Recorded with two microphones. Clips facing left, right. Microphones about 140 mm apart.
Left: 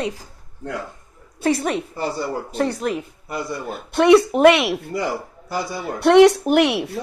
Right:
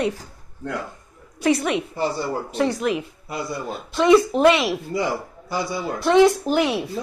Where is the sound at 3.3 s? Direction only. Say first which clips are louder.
Left 1 dB; 55° left (ahead or behind); by 7.0 s 70° left (ahead or behind).